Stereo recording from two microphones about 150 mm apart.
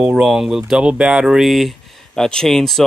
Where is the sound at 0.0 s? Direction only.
5° right (ahead or behind).